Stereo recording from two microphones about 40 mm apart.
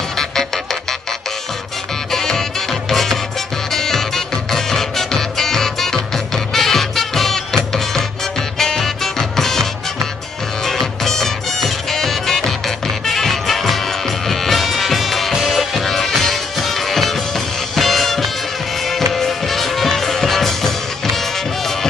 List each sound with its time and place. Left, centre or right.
0.2 s music: centre
2.0 s music: centre